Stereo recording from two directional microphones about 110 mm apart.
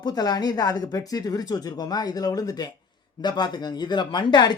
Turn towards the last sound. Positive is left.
turn(degrees=45)  # may be behind; listen again after turning